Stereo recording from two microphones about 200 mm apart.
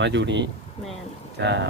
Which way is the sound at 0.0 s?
60° right (ahead or behind).